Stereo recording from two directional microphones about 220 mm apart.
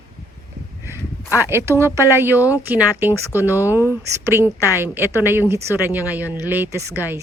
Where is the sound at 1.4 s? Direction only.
10° right (ahead or behind).